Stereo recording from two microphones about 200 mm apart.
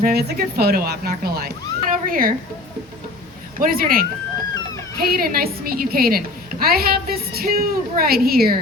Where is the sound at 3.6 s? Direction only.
45° right (ahead or behind).